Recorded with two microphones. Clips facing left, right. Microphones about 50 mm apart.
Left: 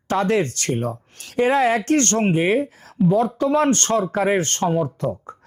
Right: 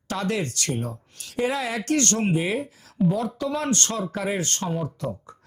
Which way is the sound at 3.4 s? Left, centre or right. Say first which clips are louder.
Left 7 dB; left.